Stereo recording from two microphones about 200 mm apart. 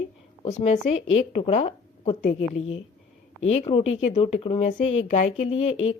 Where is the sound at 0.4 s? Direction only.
35° left (ahead or behind).